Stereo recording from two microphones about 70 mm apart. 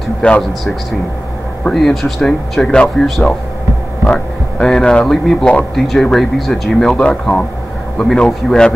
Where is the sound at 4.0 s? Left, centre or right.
Centre.